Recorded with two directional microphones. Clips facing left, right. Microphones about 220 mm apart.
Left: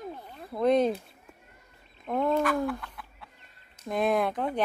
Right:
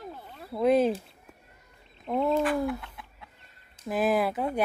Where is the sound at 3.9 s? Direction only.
5° right (ahead or behind).